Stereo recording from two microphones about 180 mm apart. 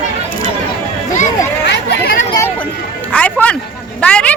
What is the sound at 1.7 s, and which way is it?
Chatter, 65° left (ahead or behind).